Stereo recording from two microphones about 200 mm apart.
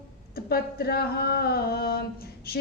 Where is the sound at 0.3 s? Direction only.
50° left (ahead or behind).